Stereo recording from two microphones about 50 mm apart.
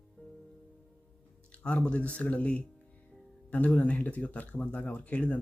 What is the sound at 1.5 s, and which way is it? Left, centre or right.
Speech, left.